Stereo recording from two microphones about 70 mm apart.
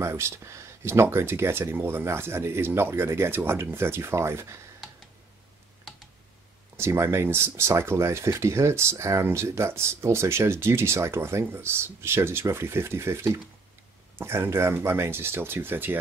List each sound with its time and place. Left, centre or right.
0.0 s speech: right
6.8 s speech: right